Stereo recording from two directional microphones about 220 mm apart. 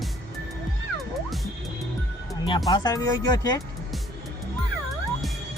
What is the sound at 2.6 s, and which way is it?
Speech, 15° left (ahead or behind).